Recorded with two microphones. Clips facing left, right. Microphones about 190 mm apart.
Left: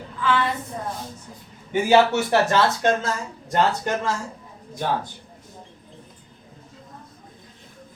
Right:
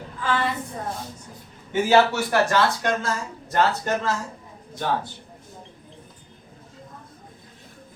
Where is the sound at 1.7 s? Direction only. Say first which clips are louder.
Left 1 dB; 20° left (ahead or behind).